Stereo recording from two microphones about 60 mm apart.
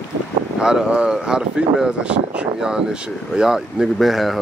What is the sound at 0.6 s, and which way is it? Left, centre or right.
Speech, centre.